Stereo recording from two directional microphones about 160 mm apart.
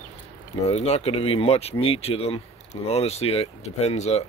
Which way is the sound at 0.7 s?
40° left (ahead or behind).